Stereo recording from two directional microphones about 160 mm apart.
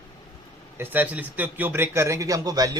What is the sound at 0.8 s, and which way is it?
A man's voice, 10° right (ahead or behind).